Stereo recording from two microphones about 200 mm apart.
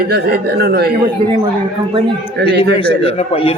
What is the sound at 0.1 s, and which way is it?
Speech, 55° right (ahead or behind).